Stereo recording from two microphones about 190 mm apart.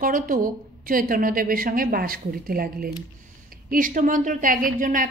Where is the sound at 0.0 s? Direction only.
45° right (ahead or behind).